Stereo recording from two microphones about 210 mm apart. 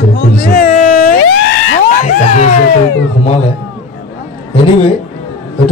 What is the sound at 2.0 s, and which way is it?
Music, 30° left (ahead or behind).